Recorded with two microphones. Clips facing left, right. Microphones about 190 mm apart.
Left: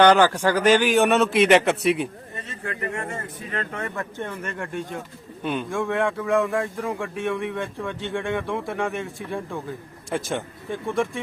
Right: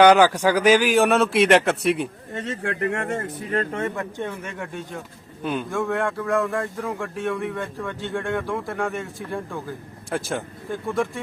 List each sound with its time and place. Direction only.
0.0 s a man's voice: 10° right (ahead or behind)
2.3 s speech: 85° right
3.8 s speech: 20° right (ahead or behind); by 11.2 s centre (ahead or behind)